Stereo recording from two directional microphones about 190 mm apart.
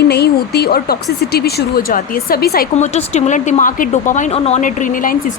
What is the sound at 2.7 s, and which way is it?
Speech, 35° left (ahead or behind).